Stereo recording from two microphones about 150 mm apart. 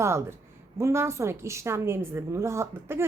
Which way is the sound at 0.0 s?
20° right (ahead or behind).